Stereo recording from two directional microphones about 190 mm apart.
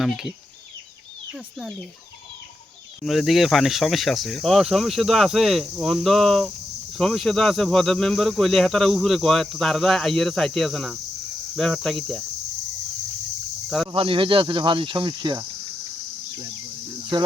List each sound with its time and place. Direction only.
0.0 s speech: centre (ahead or behind)
3.0 s speech: centre (ahead or behind)
13.9 s speech: 25° right (ahead or behind)
17.1 s speech: 25° right (ahead or behind)